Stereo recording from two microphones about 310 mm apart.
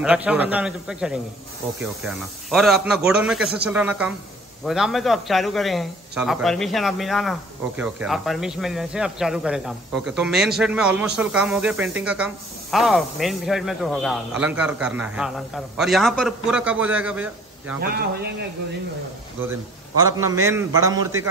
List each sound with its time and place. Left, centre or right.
0.0 s speech: centre
17.7 s a man's voice: right
20.0 s a man's voice: centre